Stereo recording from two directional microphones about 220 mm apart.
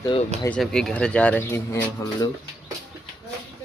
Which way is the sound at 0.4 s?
5° left (ahead or behind).